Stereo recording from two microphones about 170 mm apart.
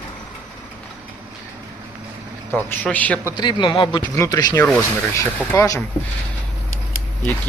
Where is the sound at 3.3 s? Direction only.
25° left (ahead or behind).